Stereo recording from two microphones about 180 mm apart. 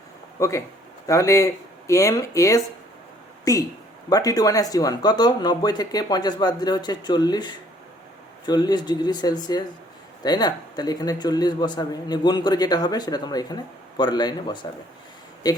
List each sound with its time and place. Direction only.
0.3 s speech: 15° left (ahead or behind)